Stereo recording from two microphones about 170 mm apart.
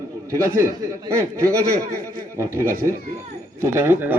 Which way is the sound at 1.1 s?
15° right (ahead or behind).